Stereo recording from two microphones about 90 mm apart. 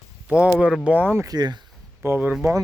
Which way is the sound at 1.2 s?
50° right (ahead or behind).